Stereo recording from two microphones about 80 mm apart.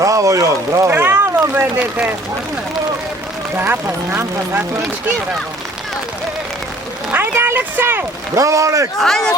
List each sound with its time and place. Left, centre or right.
0.0 s speech: right; by 2.1 s centre
3.5 s speech: right
7.1 s a sound: right
8.4 s a man's voice: right
9.0 s a man's voice: centre